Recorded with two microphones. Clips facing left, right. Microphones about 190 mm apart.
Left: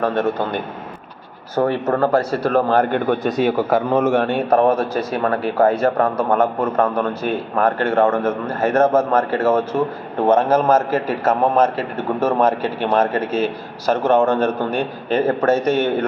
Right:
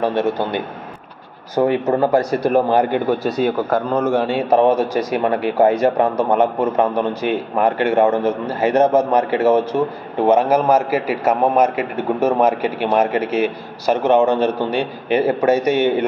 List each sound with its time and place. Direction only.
0.0 s a man's voice: 5° right (ahead or behind)
1.5 s a man's voice: 15° right (ahead or behind); by 4.2 s 5° left (ahead or behind)
4.2 s a man's voice: 10° right (ahead or behind)